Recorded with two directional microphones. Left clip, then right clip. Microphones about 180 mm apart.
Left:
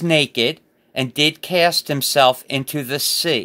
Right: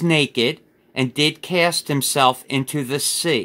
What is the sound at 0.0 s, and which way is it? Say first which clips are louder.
Speech: left 1 dB; 30° left (ahead or behind).